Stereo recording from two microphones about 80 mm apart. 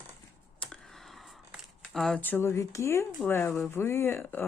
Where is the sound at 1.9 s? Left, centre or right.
Centre.